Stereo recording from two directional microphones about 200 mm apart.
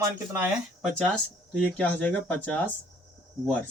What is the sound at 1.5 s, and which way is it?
Speech, 5° left (ahead or behind).